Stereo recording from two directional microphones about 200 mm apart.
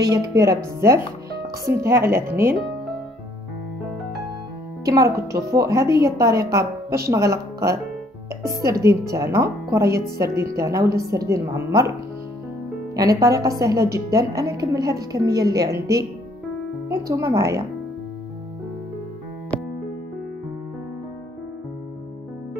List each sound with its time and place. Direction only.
0.0 s a woman's voice: 15° right (ahead or behind)
4.8 s a woman's voice: 15° right (ahead or behind)
6.2 s a woman's voice: 50° right (ahead or behind)
6.9 s a woman's voice: 15° right (ahead or behind)
9.1 s a woman's voice: 15° right (ahead or behind)
12.9 s a woman's voice: 15° right (ahead or behind)